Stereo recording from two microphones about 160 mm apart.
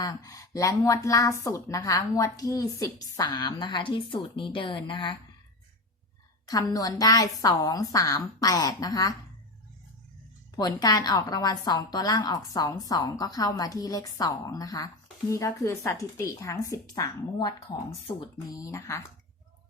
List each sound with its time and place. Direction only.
0.0 s a woman's voice: 25° left (ahead or behind)
6.4 s a woman's voice: 25° left (ahead or behind)
10.5 s a woman's voice: 25° left (ahead or behind)